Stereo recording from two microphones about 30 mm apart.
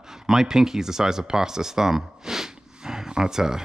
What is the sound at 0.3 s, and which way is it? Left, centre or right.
Speech, centre.